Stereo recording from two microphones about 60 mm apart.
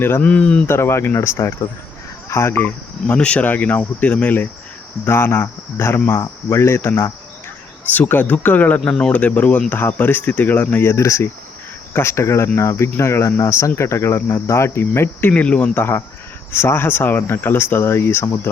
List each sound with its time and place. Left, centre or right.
0.2 s speech: centre
0.7 s speech: left
3.2 s speech: centre
5.0 s speech: left
7.9 s speech: left
10.8 s speech: left
15.3 s speech: centre
15.7 s speech: left